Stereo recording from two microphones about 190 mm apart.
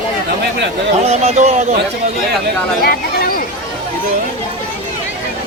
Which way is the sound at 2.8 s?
50° left (ahead or behind).